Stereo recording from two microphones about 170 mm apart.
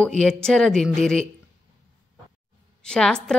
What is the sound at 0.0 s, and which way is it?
A woman's voice, 5° left (ahead or behind).